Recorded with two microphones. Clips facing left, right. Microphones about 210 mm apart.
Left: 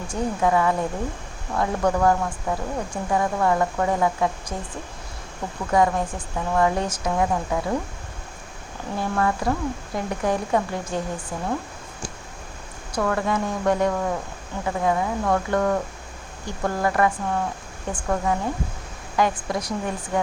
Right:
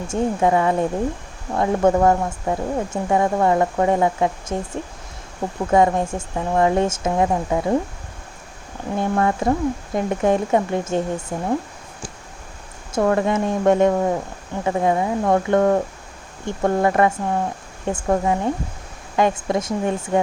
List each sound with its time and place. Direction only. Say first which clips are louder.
0.1 s speech: right 4 dB; 25° right (ahead or behind)
9.0 s speech: right 4 dB; 25° right (ahead or behind)
12.9 s speech: right 5 dB; 25° right (ahead or behind)